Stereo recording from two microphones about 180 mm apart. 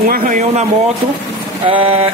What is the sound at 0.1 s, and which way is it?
Speech, 45° right (ahead or behind).